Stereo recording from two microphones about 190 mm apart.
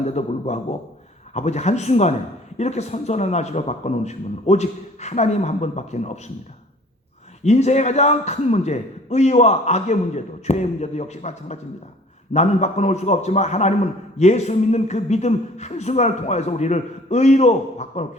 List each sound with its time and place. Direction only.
0.0 s speech: 35° left (ahead or behind)
7.4 s speech: 35° left (ahead or behind)